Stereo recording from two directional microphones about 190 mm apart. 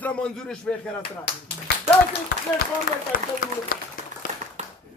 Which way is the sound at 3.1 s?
50° left (ahead or behind).